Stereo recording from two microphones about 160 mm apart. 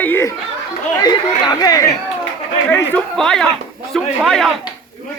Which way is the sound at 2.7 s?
5° left (ahead or behind).